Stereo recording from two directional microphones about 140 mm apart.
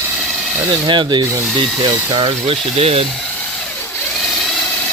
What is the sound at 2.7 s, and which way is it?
Speech, 45° right (ahead or behind).